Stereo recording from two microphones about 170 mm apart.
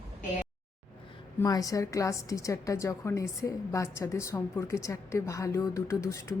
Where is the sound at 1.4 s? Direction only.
20° left (ahead or behind).